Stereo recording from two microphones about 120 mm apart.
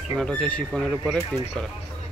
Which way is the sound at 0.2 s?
10° left (ahead or behind).